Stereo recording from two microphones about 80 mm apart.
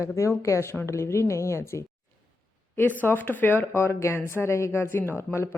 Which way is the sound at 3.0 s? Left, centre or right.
Left.